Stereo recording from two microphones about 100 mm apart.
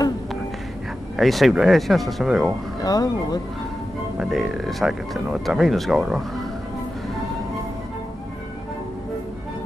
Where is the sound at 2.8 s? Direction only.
40° left (ahead or behind).